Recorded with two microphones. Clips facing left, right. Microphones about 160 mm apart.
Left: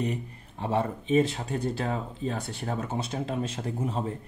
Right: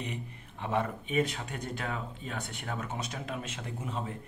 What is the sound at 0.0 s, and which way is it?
Speech, 40° left (ahead or behind).